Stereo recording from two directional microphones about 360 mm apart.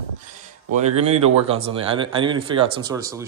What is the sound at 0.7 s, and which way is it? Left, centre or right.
Speech, centre.